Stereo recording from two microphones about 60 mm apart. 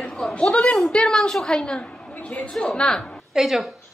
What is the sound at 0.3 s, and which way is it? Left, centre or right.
A woman's voice, centre.